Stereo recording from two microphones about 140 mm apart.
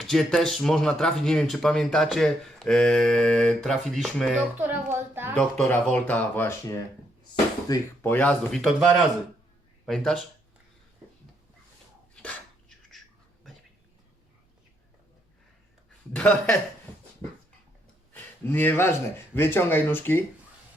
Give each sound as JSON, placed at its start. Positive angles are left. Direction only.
{"t": 0.0, "sound": "speech", "side_deg": 0}
{"t": 4.5, "sound": "speech", "side_deg": -10}
{"t": 5.4, "sound": "speech", "side_deg": 10}
{"t": 8.0, "sound": "speech", "side_deg": 10}
{"t": 12.1, "sound": "a sound", "side_deg": 10}
{"t": 16.1, "sound": "speech", "side_deg": 10}
{"t": 18.1, "sound": "speech", "side_deg": 15}